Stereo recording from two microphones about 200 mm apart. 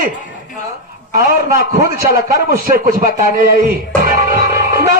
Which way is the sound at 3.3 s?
45° right (ahead or behind).